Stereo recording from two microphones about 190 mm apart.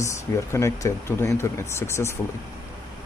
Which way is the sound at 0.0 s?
15° left (ahead or behind).